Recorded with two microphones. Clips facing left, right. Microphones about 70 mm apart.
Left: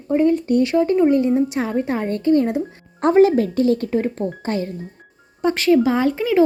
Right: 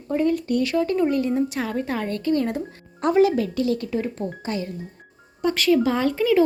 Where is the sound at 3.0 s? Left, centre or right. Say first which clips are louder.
Left 5 dB; left.